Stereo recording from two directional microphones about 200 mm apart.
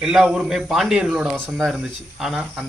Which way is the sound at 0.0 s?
Centre (ahead or behind).